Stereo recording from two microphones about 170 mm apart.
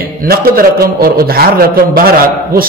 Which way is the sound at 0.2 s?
60° right (ahead or behind).